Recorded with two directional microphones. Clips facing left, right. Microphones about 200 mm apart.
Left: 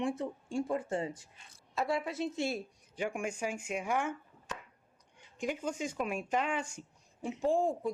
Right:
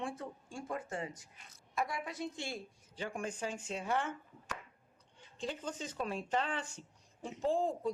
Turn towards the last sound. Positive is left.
turn(degrees=10)  # may be behind; listen again after turning